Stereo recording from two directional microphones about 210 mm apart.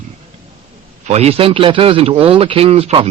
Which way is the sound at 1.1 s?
30° right (ahead or behind).